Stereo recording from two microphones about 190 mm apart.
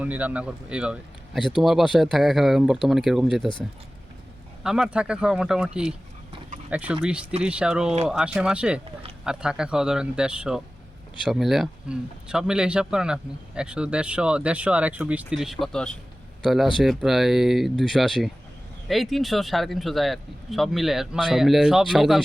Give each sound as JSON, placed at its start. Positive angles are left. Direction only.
{"t": 0.0, "sound": "a man's voice", "side_deg": -10}
{"t": 1.4, "sound": "speech", "side_deg": 25}
{"t": 1.6, "sound": "speech", "side_deg": 0}
{"t": 4.6, "sound": "speech", "side_deg": -5}